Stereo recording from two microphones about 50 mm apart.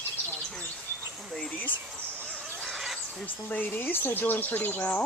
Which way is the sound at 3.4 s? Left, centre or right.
Left.